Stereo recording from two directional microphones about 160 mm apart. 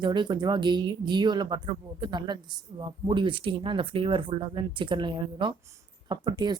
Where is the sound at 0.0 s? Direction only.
30° right (ahead or behind).